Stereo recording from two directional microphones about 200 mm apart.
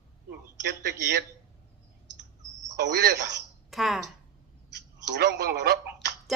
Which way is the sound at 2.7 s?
55° right (ahead or behind).